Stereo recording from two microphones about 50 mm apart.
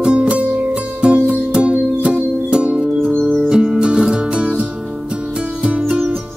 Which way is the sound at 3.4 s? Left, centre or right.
Right.